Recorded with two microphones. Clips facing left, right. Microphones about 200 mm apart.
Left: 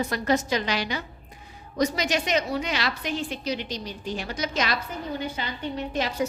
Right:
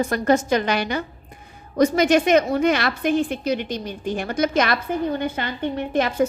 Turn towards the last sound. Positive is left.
turn(degrees=-55)  # may be behind; listen again after turning